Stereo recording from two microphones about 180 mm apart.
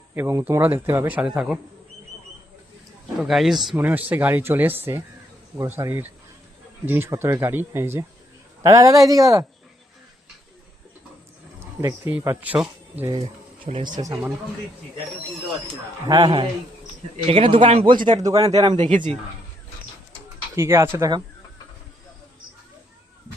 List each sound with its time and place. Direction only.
0.1 s speech: 15° right (ahead or behind)
3.2 s speech: centre (ahead or behind); by 9.5 s 20° right (ahead or behind)
11.6 s speech: 15° right (ahead or behind)
13.9 s speech: 20° right (ahead or behind)
16.0 s speech: 20° right (ahead or behind)
17.2 s speech: 30° right (ahead or behind)
18.8 s speech: 45° right (ahead or behind)
20.6 s speech: 15° right (ahead or behind)